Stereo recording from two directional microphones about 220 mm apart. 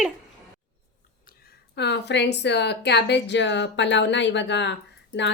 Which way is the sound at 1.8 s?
50° left (ahead or behind).